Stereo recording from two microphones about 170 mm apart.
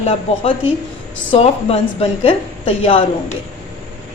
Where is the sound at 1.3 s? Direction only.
35° left (ahead or behind).